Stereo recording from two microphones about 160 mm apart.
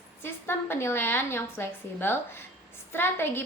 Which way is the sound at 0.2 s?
15° left (ahead or behind).